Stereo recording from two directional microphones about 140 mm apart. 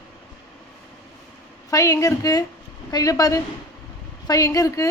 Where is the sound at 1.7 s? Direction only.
25° left (ahead or behind).